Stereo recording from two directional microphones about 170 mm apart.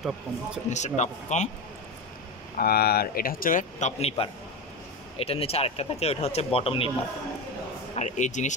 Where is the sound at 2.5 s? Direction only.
65° left (ahead or behind); by 6.9 s 35° left (ahead or behind).